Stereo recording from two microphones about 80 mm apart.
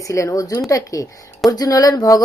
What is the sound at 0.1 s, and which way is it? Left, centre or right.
Speech, left.